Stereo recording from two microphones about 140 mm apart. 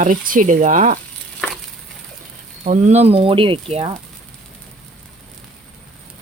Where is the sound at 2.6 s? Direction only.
60° right (ahead or behind).